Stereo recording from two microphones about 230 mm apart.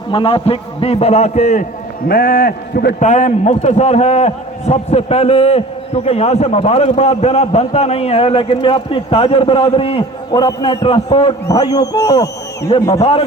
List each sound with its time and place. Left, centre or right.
0.1 s a man's voice: left
2.0 s a man's voice: left; by 12.9 s centre
12.9 s a man's voice: left